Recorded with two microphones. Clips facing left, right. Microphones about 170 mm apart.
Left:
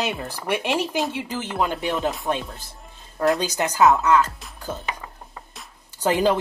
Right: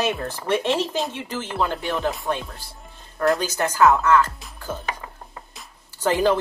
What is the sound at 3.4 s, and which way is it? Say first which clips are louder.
Speech: even; 15° left (ahead or behind).